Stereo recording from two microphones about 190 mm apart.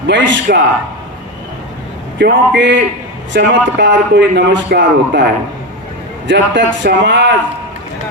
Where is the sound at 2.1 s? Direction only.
65° right (ahead or behind).